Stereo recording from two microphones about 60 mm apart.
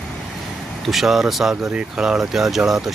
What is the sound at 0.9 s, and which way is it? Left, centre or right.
Speech, centre.